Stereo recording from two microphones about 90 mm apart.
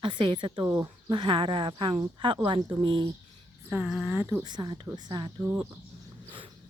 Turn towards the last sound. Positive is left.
turn(degrees=-25)  # may be behind; listen again after turning